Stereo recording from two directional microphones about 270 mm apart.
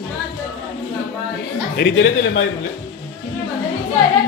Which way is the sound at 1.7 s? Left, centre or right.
Left.